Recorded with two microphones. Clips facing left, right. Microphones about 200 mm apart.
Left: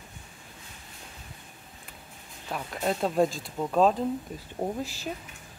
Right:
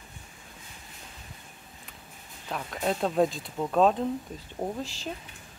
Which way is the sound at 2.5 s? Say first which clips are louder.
Even; centre (ahead or behind).